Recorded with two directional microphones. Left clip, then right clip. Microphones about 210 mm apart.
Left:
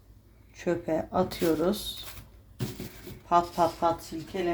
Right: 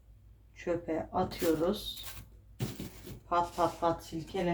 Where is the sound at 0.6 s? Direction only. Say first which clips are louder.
Left 5 dB; 50° left (ahead or behind).